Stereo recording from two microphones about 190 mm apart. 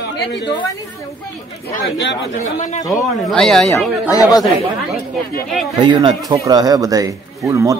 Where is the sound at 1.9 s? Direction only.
65° left (ahead or behind).